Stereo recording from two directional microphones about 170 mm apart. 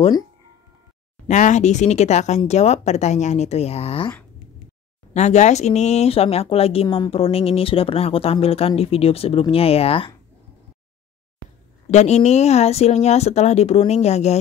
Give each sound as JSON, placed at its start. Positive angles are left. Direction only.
{"t": 1.2, "sound": "speech", "side_deg": 45}
{"t": 5.1, "sound": "speech", "side_deg": 40}
{"t": 11.9, "sound": "speech", "side_deg": 40}